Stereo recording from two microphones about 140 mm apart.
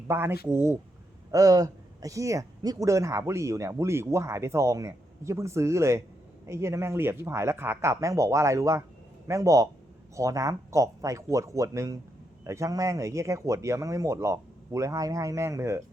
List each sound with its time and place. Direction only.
0.1 s speech: 15° right (ahead or behind)